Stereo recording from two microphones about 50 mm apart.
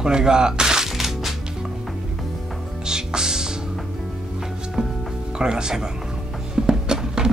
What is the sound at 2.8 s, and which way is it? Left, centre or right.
Music, centre.